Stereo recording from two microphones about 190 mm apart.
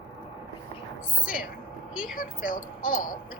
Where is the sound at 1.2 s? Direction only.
45° left (ahead or behind).